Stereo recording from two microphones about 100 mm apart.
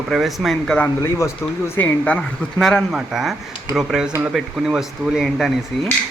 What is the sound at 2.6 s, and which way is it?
A man's voice, 5° left (ahead or behind).